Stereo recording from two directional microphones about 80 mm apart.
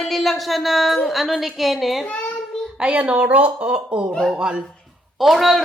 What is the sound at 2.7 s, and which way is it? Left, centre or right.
A woman's voice, centre.